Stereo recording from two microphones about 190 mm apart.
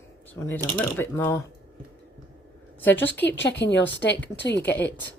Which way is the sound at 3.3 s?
65° left (ahead or behind).